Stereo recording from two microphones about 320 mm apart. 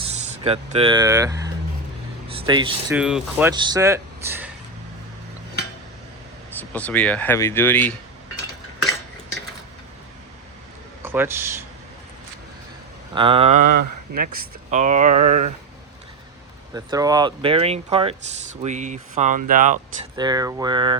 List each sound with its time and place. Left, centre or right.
0.1 s a sound: right
0.4 s speech: centre
2.9 s speech: centre
6.6 s speech: centre
11.0 s speech: centre
13.1 s speech: centre
14.1 s speech: right
16.7 s speech: centre
20.1 s speech: centre